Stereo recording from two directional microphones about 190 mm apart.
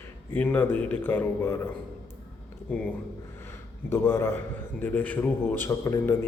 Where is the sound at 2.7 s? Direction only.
10° left (ahead or behind).